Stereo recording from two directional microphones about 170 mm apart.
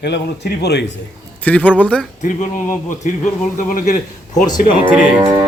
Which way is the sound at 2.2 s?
50° left (ahead or behind).